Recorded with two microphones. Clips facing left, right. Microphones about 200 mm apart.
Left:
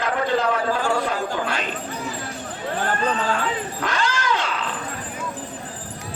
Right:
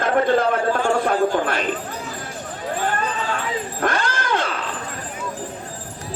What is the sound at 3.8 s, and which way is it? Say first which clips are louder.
Roaring cats: right 4 dB; 55° right (ahead or behind).